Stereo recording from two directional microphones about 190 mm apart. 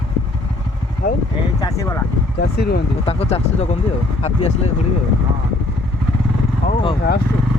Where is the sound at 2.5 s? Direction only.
55° left (ahead or behind).